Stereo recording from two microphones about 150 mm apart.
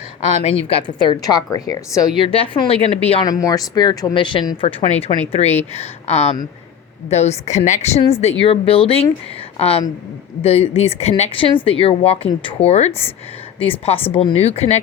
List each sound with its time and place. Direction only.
0.2 s speech: 50° left (ahead or behind); by 2.3 s 25° left (ahead or behind)
2.3 s speech: 40° left (ahead or behind)
3.2 s speech: 25° left (ahead or behind); by 14.8 s 45° left (ahead or behind)